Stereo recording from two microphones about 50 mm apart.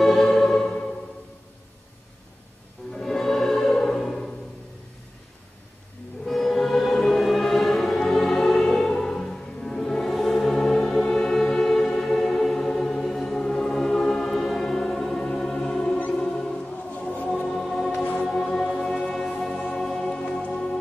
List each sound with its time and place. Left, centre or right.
0.0 s music: centre
2.9 s music: centre
6.2 s music: centre
16.9 s music: left
17.6 s music: centre